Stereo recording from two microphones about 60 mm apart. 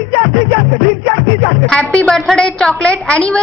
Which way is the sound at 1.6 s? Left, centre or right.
Centre.